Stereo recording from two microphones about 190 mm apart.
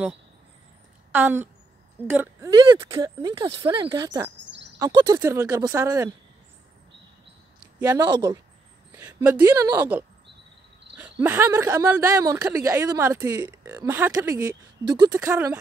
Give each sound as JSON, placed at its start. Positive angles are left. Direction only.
{"t": 1.1, "sound": "speech", "side_deg": -10}
{"t": 7.8, "sound": "speech", "side_deg": -20}